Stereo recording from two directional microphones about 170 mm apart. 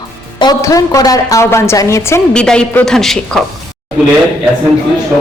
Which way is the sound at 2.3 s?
5° left (ahead or behind).